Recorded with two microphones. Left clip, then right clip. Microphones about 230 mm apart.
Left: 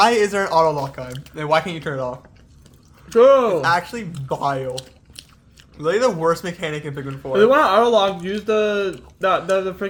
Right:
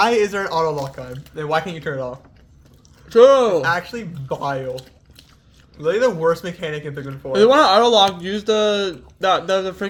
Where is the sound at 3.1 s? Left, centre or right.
Right.